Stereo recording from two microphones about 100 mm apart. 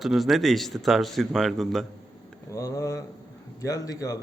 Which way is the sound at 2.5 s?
35° left (ahead or behind).